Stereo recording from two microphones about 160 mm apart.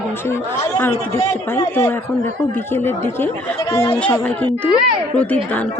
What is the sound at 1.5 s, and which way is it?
Speech, 15° left (ahead or behind).